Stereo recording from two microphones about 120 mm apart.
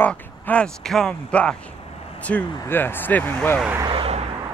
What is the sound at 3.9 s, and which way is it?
Vehicle, 50° right (ahead or behind).